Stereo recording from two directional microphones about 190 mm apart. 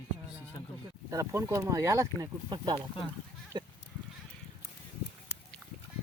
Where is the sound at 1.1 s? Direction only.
15° right (ahead or behind).